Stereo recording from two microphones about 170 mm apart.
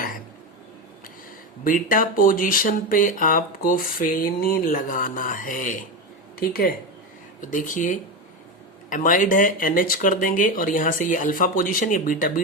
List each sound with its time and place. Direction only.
1.6 s speech: 55° left (ahead or behind)